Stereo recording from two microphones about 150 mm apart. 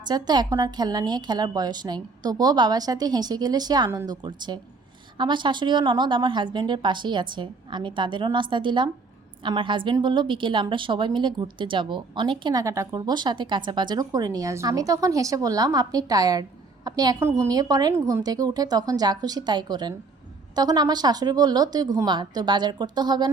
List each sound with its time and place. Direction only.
0.1 s a woman's voice: 25° right (ahead or behind)